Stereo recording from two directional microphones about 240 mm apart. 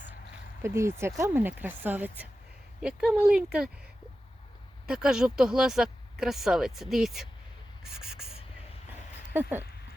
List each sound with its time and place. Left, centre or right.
0.6 s speech: centre
4.9 s speech: centre
9.3 s speech: centre